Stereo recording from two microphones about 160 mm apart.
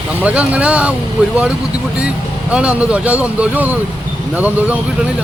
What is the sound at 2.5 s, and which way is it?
Speech, 5° right (ahead or behind).